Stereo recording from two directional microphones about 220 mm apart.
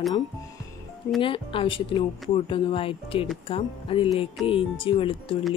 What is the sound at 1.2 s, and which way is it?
Speech, 25° left (ahead or behind).